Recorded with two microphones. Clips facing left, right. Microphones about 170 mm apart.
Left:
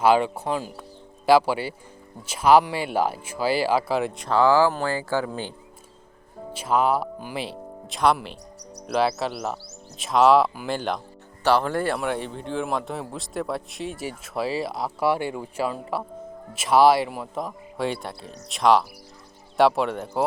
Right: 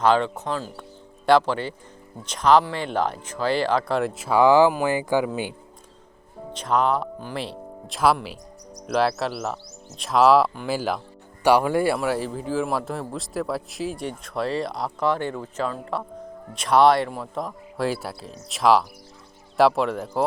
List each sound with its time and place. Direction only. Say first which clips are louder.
0.0 s speech: left 1 dB; 10° left (ahead or behind)
4.3 s speech: right 3 dB; 15° right (ahead or behind)
6.5 s a man's voice: even; 5° left (ahead or behind)